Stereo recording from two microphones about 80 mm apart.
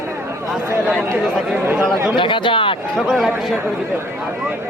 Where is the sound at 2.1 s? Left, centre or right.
Left.